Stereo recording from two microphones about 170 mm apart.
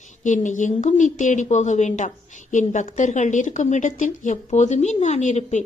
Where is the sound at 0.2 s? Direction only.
45° left (ahead or behind).